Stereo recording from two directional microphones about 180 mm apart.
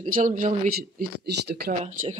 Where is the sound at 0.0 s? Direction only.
45° right (ahead or behind); by 1.8 s 60° right (ahead or behind).